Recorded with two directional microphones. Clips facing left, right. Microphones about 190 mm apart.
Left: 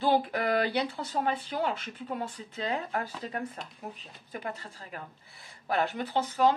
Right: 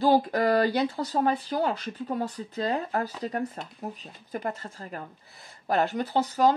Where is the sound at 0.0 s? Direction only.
40° right (ahead or behind).